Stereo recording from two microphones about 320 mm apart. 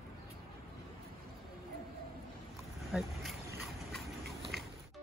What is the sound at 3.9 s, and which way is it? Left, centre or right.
Horse, centre.